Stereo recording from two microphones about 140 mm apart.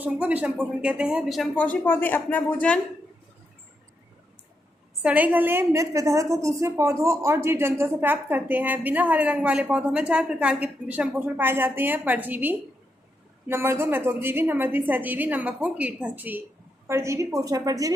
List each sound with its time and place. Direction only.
0.0 s a woman's voice: 10° right (ahead or behind)
1.5 s speech: 10° left (ahead or behind)
5.0 s a woman's voice: 10° right (ahead or behind)